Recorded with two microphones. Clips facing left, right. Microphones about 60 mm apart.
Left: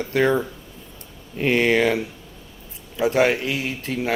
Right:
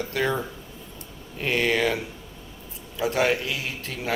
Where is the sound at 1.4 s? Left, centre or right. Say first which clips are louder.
Left 5 dB; left.